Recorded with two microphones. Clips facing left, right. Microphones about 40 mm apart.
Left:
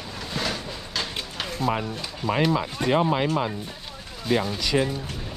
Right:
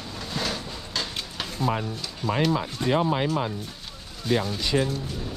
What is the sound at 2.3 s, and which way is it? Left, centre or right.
Speech, left.